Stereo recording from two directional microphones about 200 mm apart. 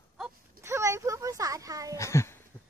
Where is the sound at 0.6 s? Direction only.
15° right (ahead or behind).